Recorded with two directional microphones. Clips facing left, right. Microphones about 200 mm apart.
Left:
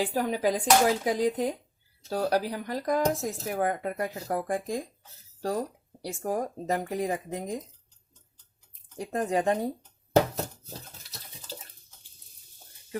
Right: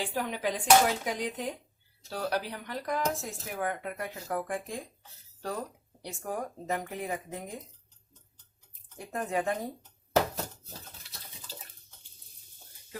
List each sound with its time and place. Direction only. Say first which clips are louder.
0.0 s speech: left 6 dB; 40° left (ahead or behind)
9.0 s speech: left 5 dB; 35° left (ahead or behind)